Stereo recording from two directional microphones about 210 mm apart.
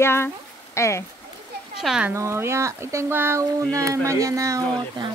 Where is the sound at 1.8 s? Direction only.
Centre (ahead or behind); by 5.1 s 20° right (ahead or behind).